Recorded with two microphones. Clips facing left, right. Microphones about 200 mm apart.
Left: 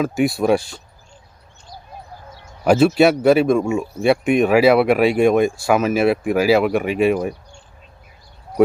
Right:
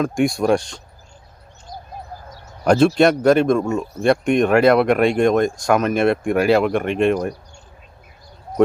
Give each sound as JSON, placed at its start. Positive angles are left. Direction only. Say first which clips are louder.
{"t": 0.0, "sound": "speech", "louder": "even", "side_deg": 5}
{"t": 1.7, "sound": "bird", "louder": "right 4 dB", "side_deg": -50}
{"t": 2.6, "sound": "speech", "louder": "left 1 dB", "side_deg": 5}